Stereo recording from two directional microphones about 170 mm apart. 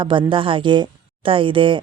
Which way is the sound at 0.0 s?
30° right (ahead or behind).